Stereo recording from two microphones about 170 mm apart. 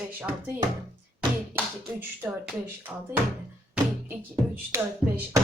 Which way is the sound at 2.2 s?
15° right (ahead or behind).